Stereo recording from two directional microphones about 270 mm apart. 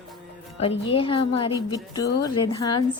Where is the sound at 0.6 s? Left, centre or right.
Left.